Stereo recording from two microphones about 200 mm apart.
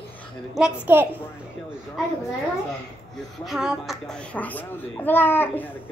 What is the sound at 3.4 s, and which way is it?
A child's voice, centre (ahead or behind).